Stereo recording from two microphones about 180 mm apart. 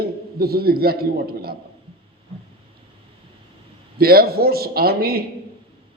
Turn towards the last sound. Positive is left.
turn(degrees=-60)  # may be behind; listen again after turning